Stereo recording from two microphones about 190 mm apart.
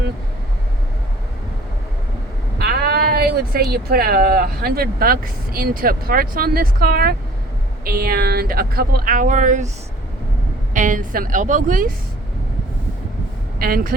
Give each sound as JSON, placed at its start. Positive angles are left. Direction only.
{"t": 2.6, "sound": "speech", "side_deg": -55}
{"t": 10.8, "sound": "speech", "side_deg": -45}
{"t": 13.6, "sound": "speech", "side_deg": -50}